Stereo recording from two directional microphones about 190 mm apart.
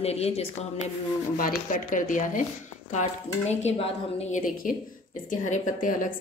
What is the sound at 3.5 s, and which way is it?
A woman's voice, 35° left (ahead or behind).